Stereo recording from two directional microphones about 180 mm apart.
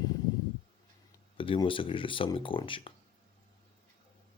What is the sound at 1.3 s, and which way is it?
Speech, 30° left (ahead or behind).